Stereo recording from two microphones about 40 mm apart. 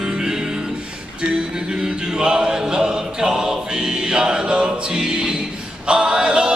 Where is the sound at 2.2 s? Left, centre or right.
Centre.